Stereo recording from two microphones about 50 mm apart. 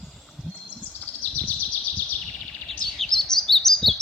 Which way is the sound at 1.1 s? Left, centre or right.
Left.